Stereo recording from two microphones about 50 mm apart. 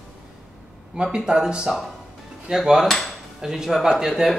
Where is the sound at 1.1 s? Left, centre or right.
Centre.